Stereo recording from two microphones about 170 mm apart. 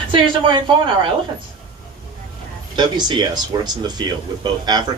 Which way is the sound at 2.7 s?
25° right (ahead or behind).